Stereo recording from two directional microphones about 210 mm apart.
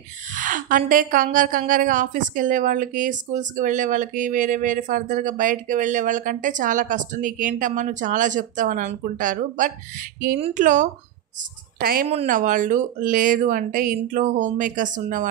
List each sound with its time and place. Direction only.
0.3 s a woman's voice: 40° right (ahead or behind)
12.1 s a woman's voice: 35° right (ahead or behind)